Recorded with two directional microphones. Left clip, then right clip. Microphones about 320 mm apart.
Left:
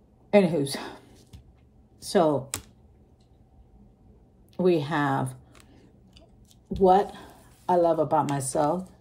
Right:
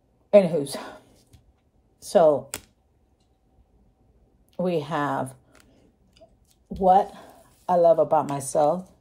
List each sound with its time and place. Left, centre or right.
0.5 s a woman's voice: centre
4.6 s speech: centre
6.8 s speech: centre